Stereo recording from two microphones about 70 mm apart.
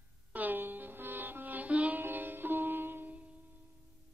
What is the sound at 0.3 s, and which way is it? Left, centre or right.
Music, right.